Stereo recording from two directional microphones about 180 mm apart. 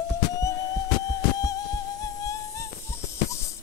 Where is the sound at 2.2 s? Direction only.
15° left (ahead or behind).